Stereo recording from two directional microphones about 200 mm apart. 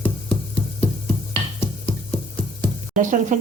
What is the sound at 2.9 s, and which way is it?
Speech, 40° right (ahead or behind).